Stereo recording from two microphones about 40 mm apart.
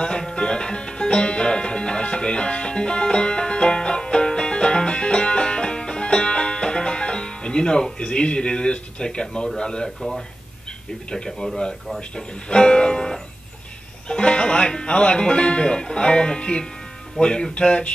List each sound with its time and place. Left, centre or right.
0.2 s music: left
9.6 s speech: left
9.8 s speech: centre
11.1 s speech: centre
12.2 s speech: left